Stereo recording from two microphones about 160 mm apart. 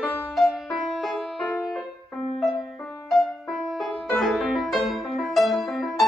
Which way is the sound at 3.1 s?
Centre (ahead or behind).